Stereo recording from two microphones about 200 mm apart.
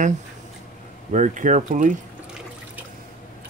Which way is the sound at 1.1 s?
40° right (ahead or behind).